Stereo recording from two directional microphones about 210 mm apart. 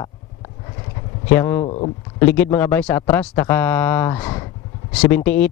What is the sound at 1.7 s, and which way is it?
Speech, 25° left (ahead or behind).